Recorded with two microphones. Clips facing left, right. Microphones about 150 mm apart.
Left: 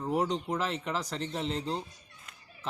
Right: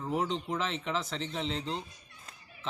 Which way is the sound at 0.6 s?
10° left (ahead or behind).